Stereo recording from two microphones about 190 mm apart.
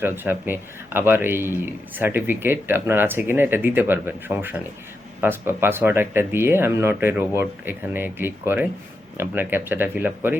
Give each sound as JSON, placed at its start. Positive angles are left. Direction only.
{"t": 0.0, "sound": "speech", "side_deg": -10}